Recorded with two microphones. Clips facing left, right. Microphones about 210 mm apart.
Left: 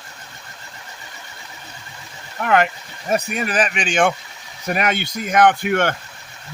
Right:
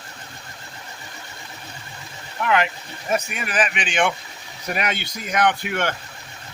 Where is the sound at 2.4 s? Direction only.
45° left (ahead or behind).